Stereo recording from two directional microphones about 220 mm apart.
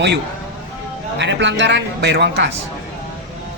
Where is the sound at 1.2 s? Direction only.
55° right (ahead or behind).